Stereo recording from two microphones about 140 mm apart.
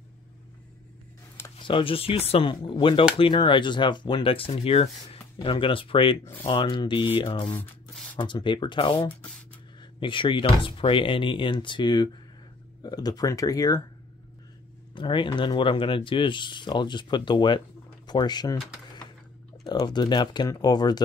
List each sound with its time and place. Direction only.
1.6 s speech: 40° left (ahead or behind)
7.9 s a sound: 5° left (ahead or behind)
8.2 s speech: 35° left (ahead or behind)
15.0 s speech: 35° left (ahead or behind)
19.6 s speech: 30° left (ahead or behind)